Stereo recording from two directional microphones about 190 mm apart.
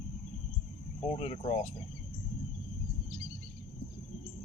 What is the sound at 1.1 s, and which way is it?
Speech, 35° left (ahead or behind).